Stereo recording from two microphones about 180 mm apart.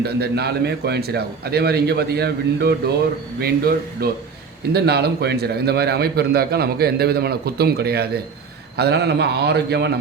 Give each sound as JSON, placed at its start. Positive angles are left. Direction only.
{"t": 0.0, "sound": "a man's voice", "side_deg": -65}